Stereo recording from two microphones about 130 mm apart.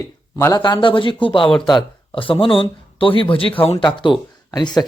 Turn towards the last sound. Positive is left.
turn(degrees=30)  # may be behind; listen again after turning